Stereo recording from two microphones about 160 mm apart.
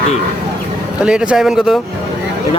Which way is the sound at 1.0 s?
5° right (ahead or behind).